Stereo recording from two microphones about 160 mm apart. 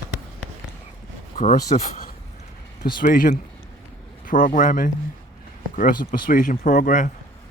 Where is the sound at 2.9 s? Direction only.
60° left (ahead or behind).